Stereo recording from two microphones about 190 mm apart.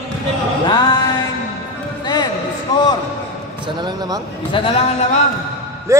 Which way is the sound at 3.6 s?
20° right (ahead or behind).